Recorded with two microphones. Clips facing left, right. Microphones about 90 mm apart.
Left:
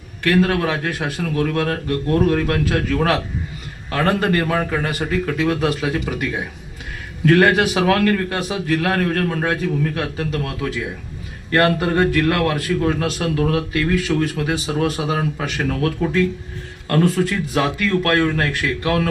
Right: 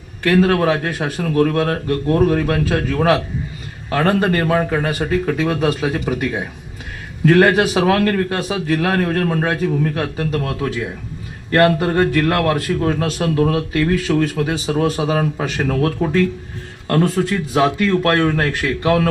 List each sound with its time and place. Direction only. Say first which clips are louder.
0.3 s a man's voice: right 3 dB; 30° right (ahead or behind)
2.0 s speech: right 2 dB; 20° right (ahead or behind)
2.6 s a man's voice: right 2 dB; 30° right (ahead or behind)
17.2 s speech: right 3 dB; 25° right (ahead or behind)